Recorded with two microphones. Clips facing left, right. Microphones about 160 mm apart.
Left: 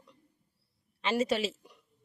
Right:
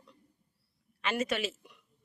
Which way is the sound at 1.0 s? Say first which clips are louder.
Left 3 dB; 30° left (ahead or behind).